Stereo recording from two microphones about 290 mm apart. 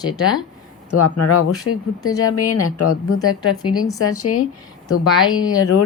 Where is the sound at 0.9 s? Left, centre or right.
Left.